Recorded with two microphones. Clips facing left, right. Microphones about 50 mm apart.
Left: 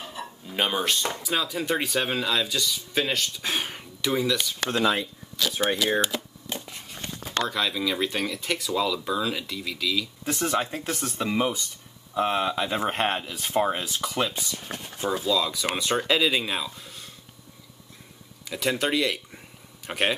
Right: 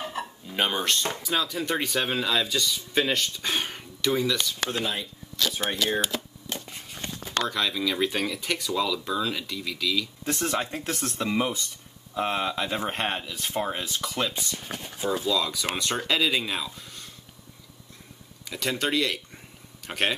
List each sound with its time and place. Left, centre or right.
0.2 s a sound: right
0.5 s speech: centre
5.7 s shuffling cards: centre
7.4 s speech: centre
18.5 s speech: centre